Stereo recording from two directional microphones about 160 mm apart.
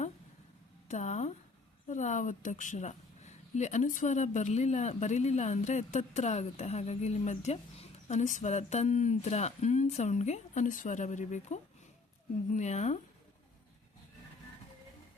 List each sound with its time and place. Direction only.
0.9 s a woman's voice: 45° left (ahead or behind)